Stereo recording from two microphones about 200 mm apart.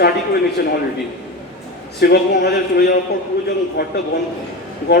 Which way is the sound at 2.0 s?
50° left (ahead or behind).